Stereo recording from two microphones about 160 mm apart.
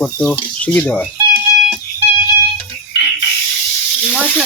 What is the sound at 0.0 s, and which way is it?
Speech, 10° left (ahead or behind).